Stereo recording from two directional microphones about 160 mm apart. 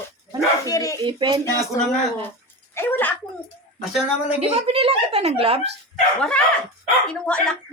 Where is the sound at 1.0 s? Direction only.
30° right (ahead or behind).